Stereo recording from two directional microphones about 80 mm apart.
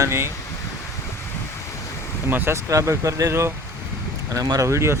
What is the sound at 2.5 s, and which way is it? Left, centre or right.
Speech, right.